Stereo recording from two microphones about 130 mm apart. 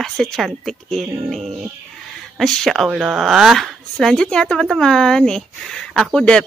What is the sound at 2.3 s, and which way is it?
Speech, centre (ahead or behind).